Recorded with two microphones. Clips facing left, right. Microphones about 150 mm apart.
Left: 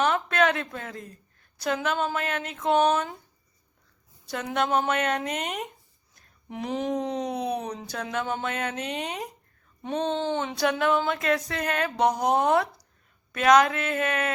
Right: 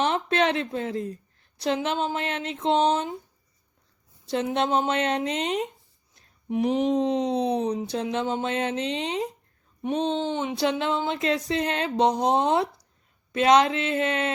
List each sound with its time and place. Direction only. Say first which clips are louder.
0.0 s speech: even; 25° right (ahead or behind)
4.3 s speech: right 2 dB; 25° right (ahead or behind)